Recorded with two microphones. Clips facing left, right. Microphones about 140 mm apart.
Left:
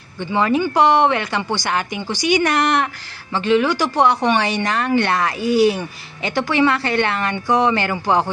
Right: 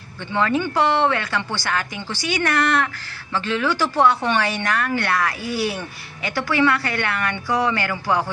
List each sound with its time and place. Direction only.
0.3 s speech: 15° left (ahead or behind)